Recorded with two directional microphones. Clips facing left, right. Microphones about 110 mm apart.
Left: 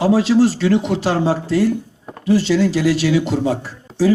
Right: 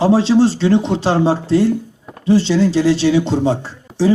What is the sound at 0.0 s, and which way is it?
Speech, 30° right (ahead or behind).